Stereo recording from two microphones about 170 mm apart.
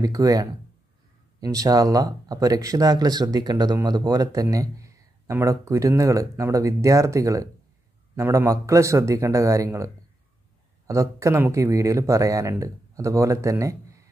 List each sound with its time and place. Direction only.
0.0 s speech: 20° right (ahead or behind)
10.9 s speech: 15° right (ahead or behind)